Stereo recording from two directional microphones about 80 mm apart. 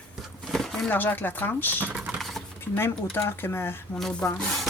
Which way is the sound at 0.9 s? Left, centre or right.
Left.